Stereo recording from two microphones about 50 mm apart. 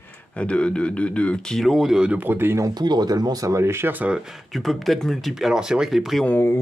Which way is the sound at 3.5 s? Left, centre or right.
Right.